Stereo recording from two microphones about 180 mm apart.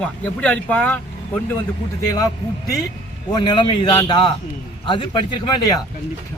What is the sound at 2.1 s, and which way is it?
Speech, 20° left (ahead or behind).